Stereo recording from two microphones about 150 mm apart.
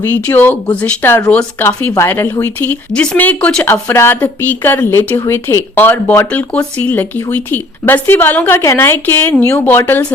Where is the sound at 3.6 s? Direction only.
15° left (ahead or behind).